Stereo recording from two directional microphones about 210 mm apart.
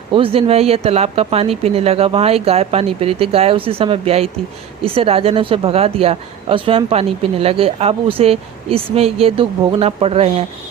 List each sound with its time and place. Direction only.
0.1 s speech: 25° right (ahead or behind)